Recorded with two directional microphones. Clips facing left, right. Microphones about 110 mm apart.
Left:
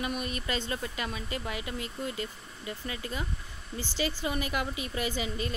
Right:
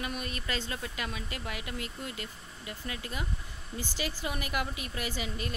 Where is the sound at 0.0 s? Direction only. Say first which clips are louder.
Left 3 dB; 5° left (ahead or behind).